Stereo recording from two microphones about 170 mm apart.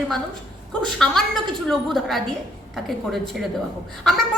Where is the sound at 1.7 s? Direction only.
Centre (ahead or behind).